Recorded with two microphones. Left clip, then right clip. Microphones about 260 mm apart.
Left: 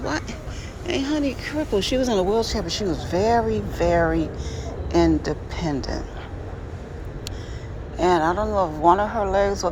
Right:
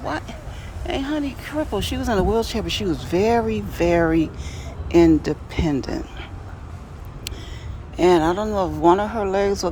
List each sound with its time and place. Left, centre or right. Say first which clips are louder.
0.0 s a sound: even; centre
0.9 s speech: left 1 dB; centre
2.2 s speech: right 1 dB; right
7.9 s speech: right 2 dB; right